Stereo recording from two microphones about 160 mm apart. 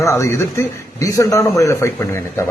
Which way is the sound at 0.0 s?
20° left (ahead or behind).